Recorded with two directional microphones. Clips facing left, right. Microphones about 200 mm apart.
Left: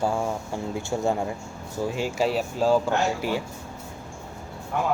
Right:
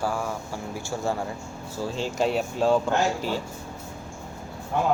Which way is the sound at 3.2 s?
15° left (ahead or behind).